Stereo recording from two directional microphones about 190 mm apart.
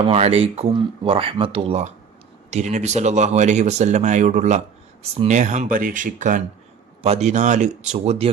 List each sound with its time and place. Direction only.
0.0 s speech: 30° right (ahead or behind)